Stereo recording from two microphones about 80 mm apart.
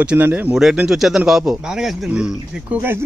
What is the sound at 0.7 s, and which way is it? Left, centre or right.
A man's voice, centre.